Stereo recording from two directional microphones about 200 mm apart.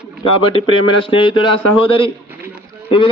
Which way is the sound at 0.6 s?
90° left.